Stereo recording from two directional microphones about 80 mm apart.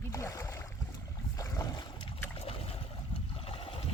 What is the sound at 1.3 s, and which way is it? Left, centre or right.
Boat, left.